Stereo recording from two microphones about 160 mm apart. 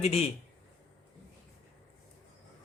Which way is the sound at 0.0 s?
40° left (ahead or behind).